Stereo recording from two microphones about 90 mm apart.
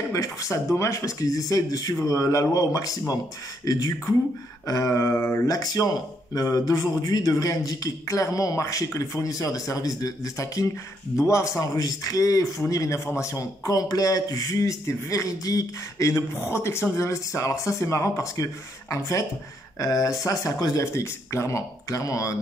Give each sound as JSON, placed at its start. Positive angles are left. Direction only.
{"t": 0.1, "sound": "a man's voice", "side_deg": 35}
{"t": 3.6, "sound": "beatboxing", "side_deg": 40}
{"t": 4.6, "sound": "a man's voice", "side_deg": 35}
{"t": 5.5, "sound": "beatboxing", "side_deg": 45}
{"t": 6.3, "sound": "a man's voice", "side_deg": 40}